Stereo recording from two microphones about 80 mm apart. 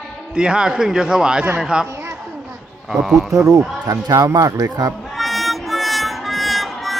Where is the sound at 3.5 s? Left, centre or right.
Right.